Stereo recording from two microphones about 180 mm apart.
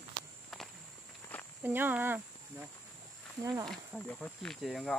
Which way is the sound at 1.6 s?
10° right (ahead or behind).